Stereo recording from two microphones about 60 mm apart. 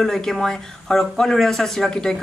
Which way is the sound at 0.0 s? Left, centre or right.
Centre.